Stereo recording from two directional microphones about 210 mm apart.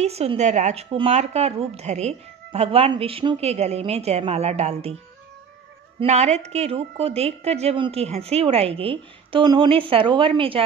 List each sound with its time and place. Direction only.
0.0 s speech: 30° right (ahead or behind)
5.9 s speech: 30° right (ahead or behind)